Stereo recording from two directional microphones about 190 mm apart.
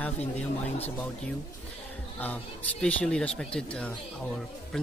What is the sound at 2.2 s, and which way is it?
Speech, 10° left (ahead or behind).